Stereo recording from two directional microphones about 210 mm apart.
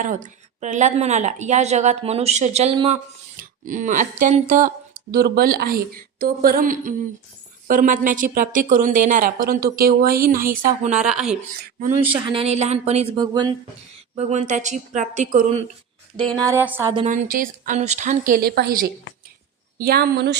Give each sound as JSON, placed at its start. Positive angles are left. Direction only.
{"t": 0.0, "sound": "a woman's voice", "side_deg": -35}
{"t": 14.2, "sound": "a woman's voice", "side_deg": -30}
{"t": 16.5, "sound": "speech", "side_deg": -10}
{"t": 17.1, "sound": "a woman's voice", "side_deg": -40}